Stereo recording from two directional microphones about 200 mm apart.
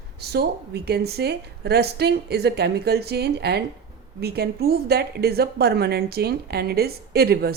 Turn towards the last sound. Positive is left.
turn(degrees=-50)  # may be behind; listen again after turning